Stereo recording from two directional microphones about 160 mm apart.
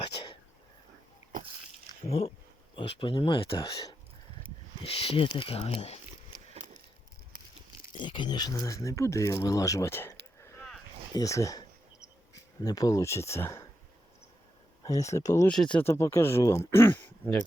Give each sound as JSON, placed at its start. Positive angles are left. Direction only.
{"t": 2.0, "sound": "speech", "side_deg": 40}
{"t": 4.8, "sound": "speech", "side_deg": 35}
{"t": 7.9, "sound": "speech", "side_deg": 30}
{"t": 10.4, "sound": "a sound", "side_deg": 15}
{"t": 11.1, "sound": "speech", "side_deg": 20}
{"t": 14.8, "sound": "speech", "side_deg": 20}
{"t": 15.4, "sound": "speech", "side_deg": 5}